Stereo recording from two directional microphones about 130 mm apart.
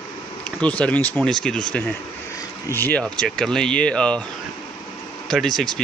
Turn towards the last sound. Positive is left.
turn(degrees=5)  # may be behind; listen again after turning